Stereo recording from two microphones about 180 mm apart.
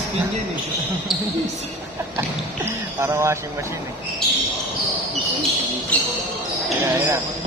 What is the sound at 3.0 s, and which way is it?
Music, 15° right (ahead or behind).